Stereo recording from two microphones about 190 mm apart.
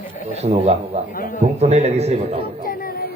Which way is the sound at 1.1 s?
50° left (ahead or behind).